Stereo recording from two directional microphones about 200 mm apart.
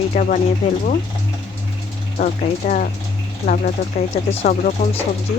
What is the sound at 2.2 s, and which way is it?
Speech, 40° left (ahead or behind).